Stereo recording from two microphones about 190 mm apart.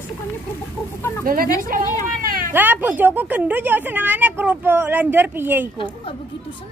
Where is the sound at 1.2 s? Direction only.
50° right (ahead or behind).